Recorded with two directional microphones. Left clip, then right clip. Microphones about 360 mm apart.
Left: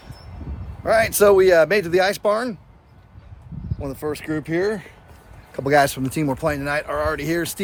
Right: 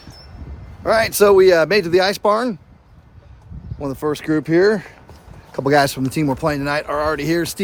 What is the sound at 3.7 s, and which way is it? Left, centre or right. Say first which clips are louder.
Speech: right 5 dB; centre.